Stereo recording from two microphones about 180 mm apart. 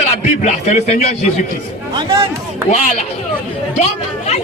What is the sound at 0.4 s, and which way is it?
Speech, 40° left (ahead or behind).